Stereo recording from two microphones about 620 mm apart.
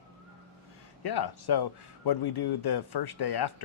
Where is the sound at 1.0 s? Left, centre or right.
Left.